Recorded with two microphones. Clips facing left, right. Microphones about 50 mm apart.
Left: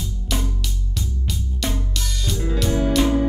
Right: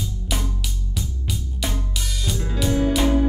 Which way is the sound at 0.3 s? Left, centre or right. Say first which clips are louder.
Left 3 dB; centre.